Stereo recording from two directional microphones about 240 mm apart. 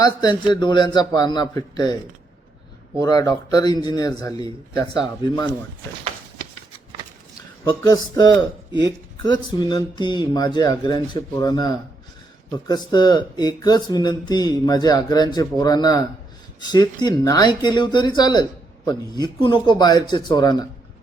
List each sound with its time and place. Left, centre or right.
0.0 s speech: centre
3.0 s speech: centre
7.6 s speech: centre